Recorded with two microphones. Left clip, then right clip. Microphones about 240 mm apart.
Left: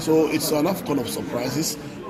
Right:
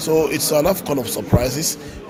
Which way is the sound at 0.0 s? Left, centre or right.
Right.